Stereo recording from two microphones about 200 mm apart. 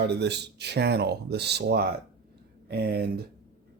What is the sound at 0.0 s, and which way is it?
Speech, 55° right (ahead or behind).